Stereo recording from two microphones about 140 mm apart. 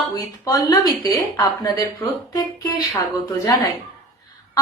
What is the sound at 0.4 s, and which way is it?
Speech, 25° left (ahead or behind).